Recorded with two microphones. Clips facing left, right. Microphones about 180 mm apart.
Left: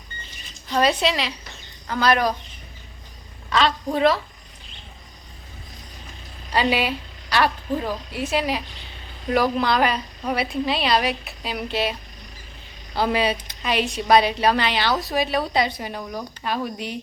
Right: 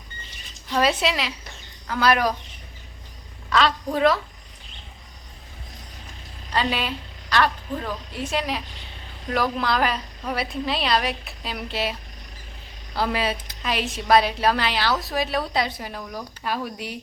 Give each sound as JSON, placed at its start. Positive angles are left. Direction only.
{"t": 0.7, "sound": "a woman's voice", "side_deg": -5}
{"t": 3.5, "sound": "a woman's voice", "side_deg": 0}
{"t": 6.5, "sound": "a woman's voice", "side_deg": 10}